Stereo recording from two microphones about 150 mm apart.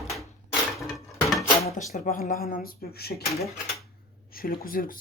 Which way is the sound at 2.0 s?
60° left (ahead or behind).